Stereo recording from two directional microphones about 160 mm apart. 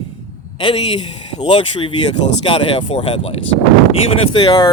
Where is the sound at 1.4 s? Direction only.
30° left (ahead or behind).